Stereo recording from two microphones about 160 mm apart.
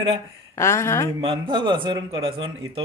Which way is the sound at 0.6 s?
15° left (ahead or behind).